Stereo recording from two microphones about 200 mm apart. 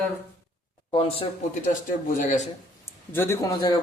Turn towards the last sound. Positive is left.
turn(degrees=20)  # may be behind; listen again after turning